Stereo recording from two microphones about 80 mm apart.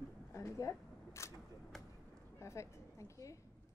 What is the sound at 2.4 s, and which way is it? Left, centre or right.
Speech, left.